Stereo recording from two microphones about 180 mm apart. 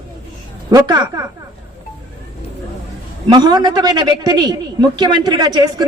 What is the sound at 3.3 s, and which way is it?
Speech, 25° right (ahead or behind).